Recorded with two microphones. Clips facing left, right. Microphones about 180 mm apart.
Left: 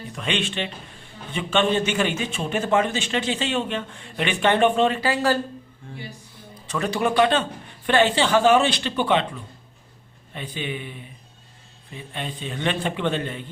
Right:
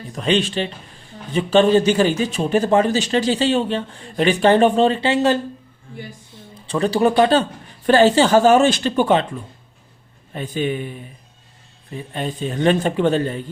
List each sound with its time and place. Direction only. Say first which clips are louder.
0.1 s a man's voice: right 8 dB; 35° right (ahead or behind)
6.5 s a man's voice: right 6 dB; 30° right (ahead or behind)
10.3 s a man's voice: right 8 dB; 45° right (ahead or behind)
11.9 s a man's voice: right 7 dB; 40° right (ahead or behind)